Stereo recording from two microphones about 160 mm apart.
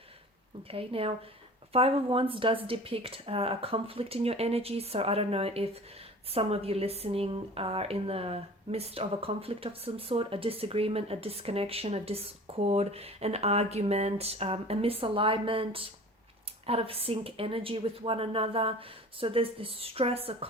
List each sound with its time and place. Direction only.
0.7 s a woman's voice: 35° right (ahead or behind)